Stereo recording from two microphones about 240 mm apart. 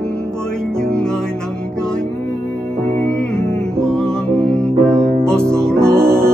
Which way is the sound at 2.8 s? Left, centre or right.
Centre.